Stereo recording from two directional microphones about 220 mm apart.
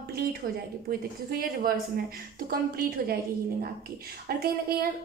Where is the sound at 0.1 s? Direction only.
45° right (ahead or behind).